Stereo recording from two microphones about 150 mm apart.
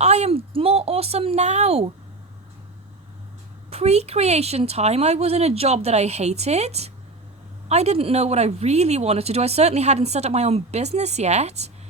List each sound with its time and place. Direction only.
0.0 s speech: 45° right (ahead or behind)
3.7 s speech: 45° right (ahead or behind)